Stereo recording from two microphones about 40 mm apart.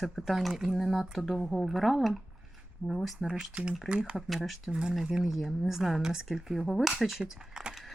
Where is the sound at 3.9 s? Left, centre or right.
Right.